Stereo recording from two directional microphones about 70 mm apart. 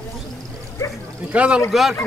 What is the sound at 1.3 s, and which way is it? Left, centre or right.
Speech, centre.